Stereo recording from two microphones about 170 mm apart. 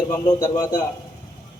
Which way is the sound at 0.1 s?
20° left (ahead or behind).